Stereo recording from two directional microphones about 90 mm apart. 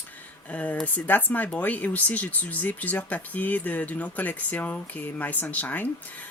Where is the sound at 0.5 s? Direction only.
15° left (ahead or behind).